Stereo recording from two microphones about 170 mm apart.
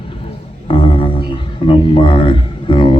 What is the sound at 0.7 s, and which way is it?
Music, 30° left (ahead or behind).